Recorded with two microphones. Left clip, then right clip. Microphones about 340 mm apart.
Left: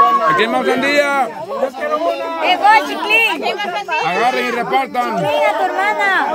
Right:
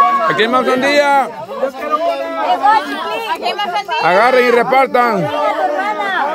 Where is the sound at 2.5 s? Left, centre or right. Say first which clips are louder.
Left 1 dB; left.